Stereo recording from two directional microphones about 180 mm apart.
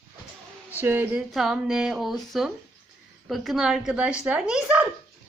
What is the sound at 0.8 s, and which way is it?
Female singing, 10° right (ahead or behind).